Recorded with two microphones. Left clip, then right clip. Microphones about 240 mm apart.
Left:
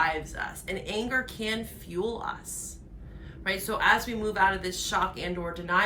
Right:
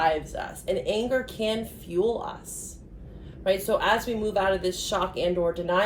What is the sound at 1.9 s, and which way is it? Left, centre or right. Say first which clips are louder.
Speech: right 6 dB; left.